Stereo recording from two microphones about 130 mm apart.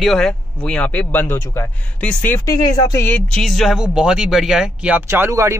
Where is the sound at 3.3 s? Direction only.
Centre (ahead or behind).